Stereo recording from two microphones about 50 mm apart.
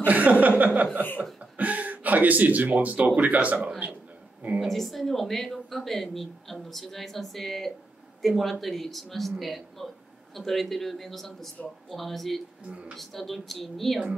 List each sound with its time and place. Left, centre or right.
0.0 s chuckle: right
1.4 s a sound: right
3.2 s speech: right
4.6 s speech: centre
12.6 s speech: right
12.9 s speech: centre